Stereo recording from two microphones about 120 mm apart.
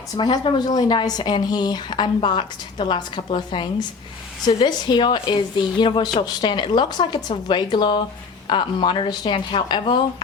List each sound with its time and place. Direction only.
0.2 s speech: 40° left (ahead or behind)